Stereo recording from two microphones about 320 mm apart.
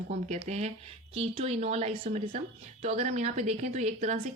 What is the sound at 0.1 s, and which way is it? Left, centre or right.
A woman's voice, right.